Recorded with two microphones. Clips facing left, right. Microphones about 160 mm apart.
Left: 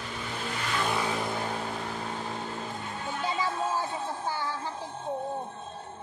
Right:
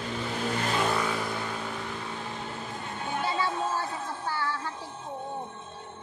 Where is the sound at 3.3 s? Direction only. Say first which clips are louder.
Left 2 dB; 15° left (ahead or behind).